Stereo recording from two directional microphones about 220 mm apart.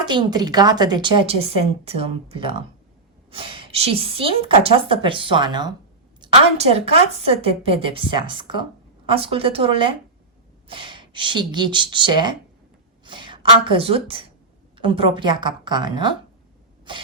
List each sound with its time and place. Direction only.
0.0 s a woman's voice: 20° right (ahead or behind)